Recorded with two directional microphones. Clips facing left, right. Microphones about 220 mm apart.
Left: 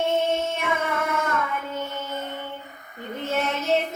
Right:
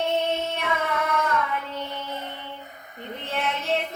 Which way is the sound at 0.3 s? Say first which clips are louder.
Left 2 dB; 50° left (ahead or behind).